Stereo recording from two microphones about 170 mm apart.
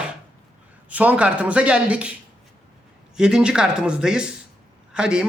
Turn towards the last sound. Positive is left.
turn(degrees=-5)  # may be behind; listen again after turning